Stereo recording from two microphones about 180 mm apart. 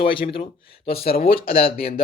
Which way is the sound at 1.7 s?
30° left (ahead or behind).